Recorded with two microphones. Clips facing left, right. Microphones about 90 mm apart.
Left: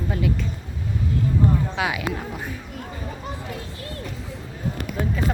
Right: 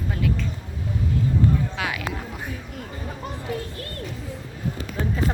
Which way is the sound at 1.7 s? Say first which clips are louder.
Left 3 dB; 15° left (ahead or behind).